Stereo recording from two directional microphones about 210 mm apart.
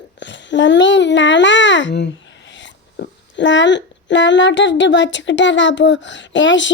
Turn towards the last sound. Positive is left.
turn(degrees=60)  # may be behind; listen again after turning